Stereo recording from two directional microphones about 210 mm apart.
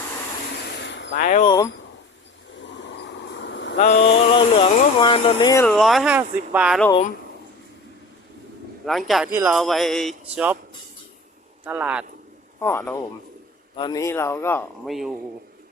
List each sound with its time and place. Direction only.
0.8 s vehicle: 60° left (ahead or behind)
1.1 s speech: 35° left (ahead or behind)
1.5 s a man's voice: 15° left (ahead or behind)
2.6 s a sound: 60° left (ahead or behind)
3.8 s a sound: 35° left (ahead or behind)
4.4 s a sound: 25° left (ahead or behind)
5.6 s speech: centre (ahead or behind)
8.8 s speech: centre (ahead or behind)
11.6 s speech: 5° right (ahead or behind)
12.5 s a man's voice: 10° left (ahead or behind)
14.8 s speech: centre (ahead or behind)